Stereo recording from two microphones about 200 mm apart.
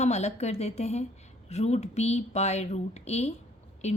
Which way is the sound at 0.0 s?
35° left (ahead or behind).